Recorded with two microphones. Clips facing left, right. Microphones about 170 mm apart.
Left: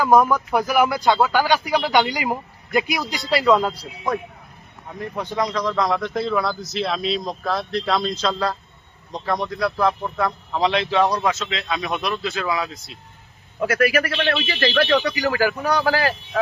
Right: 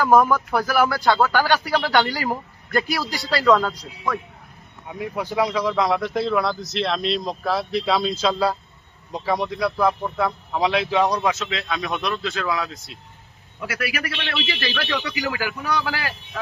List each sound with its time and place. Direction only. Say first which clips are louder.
0.0 s a man's voice: even; 10° left (ahead or behind)
4.9 s speech: right 1 dB; 10° right (ahead or behind)
13.6 s speech: left 9 dB; 45° left (ahead or behind)